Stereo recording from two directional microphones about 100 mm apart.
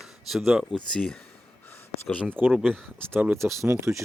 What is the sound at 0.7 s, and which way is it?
Speech, 10° left (ahead or behind).